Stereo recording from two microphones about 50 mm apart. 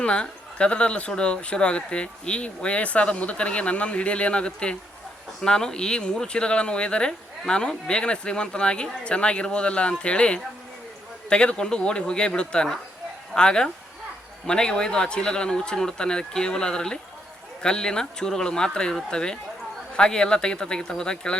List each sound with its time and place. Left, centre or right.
0.0 s speech: left